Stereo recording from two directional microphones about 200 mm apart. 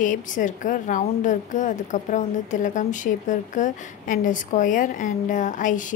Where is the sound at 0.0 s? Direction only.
40° left (ahead or behind).